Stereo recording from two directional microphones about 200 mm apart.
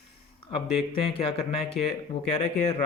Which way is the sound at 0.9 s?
25° left (ahead or behind).